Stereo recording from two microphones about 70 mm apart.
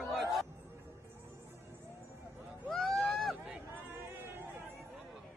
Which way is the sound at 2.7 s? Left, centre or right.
Centre.